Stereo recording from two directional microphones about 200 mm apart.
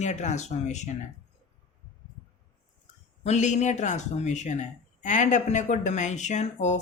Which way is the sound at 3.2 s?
35° left (ahead or behind).